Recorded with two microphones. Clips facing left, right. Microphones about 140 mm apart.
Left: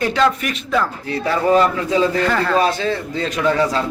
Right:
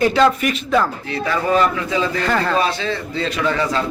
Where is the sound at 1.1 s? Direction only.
35° left (ahead or behind).